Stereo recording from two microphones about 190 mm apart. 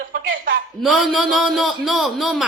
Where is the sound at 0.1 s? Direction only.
50° right (ahead or behind).